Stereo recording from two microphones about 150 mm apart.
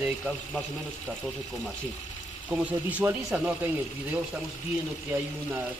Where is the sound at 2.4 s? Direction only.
10° right (ahead or behind).